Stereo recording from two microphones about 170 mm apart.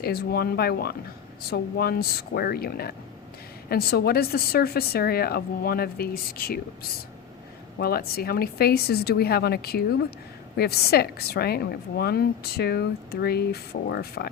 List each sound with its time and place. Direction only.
0.0 s a woman's voice: 65° left (ahead or behind)
7.8 s a woman's voice: 65° left (ahead or behind)